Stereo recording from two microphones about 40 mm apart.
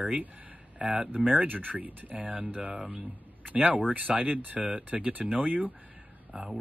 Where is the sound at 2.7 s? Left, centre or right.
Centre.